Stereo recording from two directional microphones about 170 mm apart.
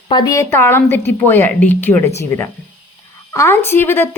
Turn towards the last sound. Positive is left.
turn(degrees=15)  # may be behind; listen again after turning